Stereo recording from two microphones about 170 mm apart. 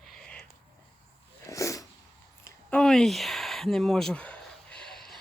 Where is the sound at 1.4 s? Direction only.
20° left (ahead or behind).